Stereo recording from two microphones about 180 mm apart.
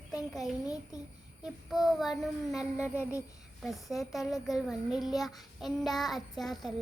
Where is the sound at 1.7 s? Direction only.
Centre (ahead or behind).